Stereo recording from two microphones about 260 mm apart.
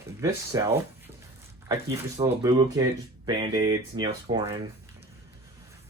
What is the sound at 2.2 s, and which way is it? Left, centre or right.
Speech, centre.